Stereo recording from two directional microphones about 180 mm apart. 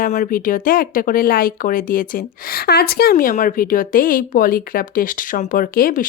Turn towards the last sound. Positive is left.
turn(degrees=50)  # may be behind; listen again after turning